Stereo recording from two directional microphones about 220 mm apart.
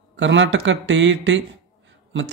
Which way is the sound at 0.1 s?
55° right (ahead or behind).